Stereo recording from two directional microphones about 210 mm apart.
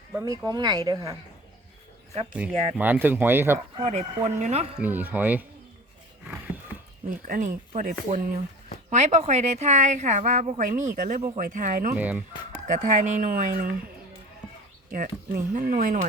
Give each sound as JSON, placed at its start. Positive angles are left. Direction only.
{"t": 0.1, "sound": "speech", "side_deg": -15}
{"t": 2.5, "sound": "speech", "side_deg": -25}
{"t": 2.7, "sound": "speech", "side_deg": -10}
{"t": 3.8, "sound": "a woman's voice", "side_deg": -30}
{"t": 4.8, "sound": "speech", "side_deg": -10}
{"t": 6.2, "sound": "a sound", "side_deg": -10}
{"t": 7.1, "sound": "a woman's voice", "side_deg": -40}
{"t": 11.9, "sound": "speech", "side_deg": -10}
{"t": 12.6, "sound": "a woman's voice", "side_deg": -40}
{"t": 14.8, "sound": "a woman's voice", "side_deg": -40}